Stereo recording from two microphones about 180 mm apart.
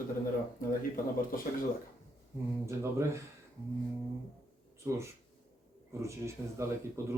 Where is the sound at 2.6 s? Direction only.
15° right (ahead or behind).